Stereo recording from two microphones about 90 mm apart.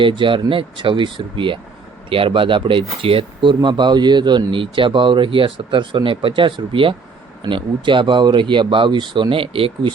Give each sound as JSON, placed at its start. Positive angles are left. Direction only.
{"t": 0.0, "sound": "speech", "side_deg": -65}
{"t": 2.0, "sound": "speech", "side_deg": -85}
{"t": 3.0, "sound": "speech", "side_deg": -85}